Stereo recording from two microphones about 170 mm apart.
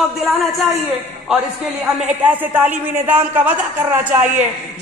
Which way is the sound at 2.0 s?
10° right (ahead or behind).